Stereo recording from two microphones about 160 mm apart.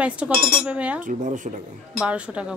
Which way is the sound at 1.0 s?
55° right (ahead or behind).